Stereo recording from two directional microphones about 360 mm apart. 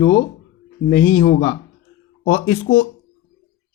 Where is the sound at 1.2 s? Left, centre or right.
Centre.